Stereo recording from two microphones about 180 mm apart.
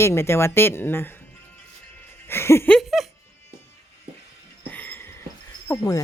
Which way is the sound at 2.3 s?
15° left (ahead or behind).